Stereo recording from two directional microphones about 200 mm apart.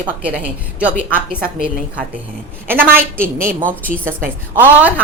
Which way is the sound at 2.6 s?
10° right (ahead or behind).